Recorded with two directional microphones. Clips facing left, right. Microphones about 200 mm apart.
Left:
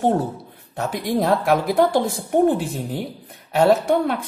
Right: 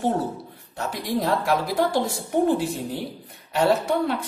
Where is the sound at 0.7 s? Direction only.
55° left (ahead or behind).